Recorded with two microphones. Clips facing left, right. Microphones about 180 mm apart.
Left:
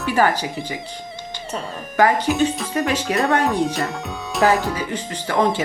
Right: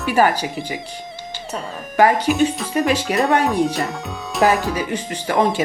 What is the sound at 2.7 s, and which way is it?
Speech, 10° right (ahead or behind).